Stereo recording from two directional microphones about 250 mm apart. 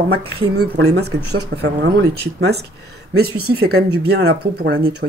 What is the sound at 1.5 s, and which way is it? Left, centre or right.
Speech, right.